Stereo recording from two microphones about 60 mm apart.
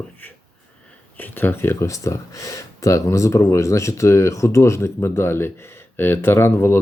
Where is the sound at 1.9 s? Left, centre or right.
Left.